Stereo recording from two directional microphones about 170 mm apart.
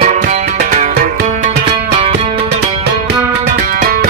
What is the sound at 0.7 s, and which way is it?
Music, 45° right (ahead or behind).